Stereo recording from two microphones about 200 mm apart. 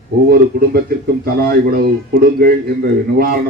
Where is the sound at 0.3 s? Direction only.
50° right (ahead or behind).